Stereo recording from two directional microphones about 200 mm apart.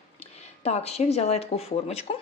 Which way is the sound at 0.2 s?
35° left (ahead or behind).